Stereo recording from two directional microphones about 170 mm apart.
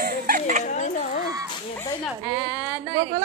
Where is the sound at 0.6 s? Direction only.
45° left (ahead or behind).